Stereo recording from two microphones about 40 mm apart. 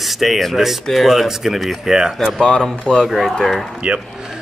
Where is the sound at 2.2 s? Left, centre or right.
Centre.